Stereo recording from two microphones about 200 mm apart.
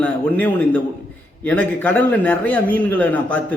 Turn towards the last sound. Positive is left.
turn(degrees=5)  # may be behind; listen again after turning